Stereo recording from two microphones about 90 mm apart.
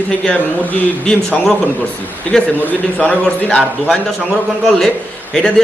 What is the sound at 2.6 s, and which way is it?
Speech, 15° left (ahead or behind).